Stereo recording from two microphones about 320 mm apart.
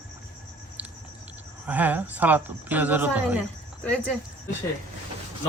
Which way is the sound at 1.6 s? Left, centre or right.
Centre.